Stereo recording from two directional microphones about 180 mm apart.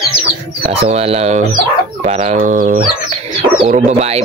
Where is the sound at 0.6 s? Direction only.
35° right (ahead or behind).